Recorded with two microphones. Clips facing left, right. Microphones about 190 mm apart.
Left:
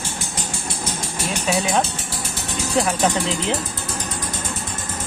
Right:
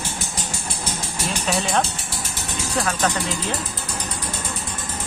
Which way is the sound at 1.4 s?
5° left (ahead or behind).